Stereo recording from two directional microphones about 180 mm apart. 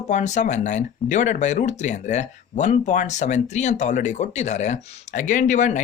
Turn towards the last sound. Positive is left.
turn(degrees=40)  # may be behind; listen again after turning